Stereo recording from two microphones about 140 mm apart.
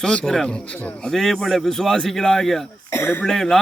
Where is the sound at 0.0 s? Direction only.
5° left (ahead or behind).